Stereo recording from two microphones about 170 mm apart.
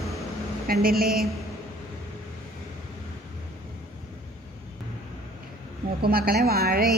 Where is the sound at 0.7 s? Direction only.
60° right (ahead or behind).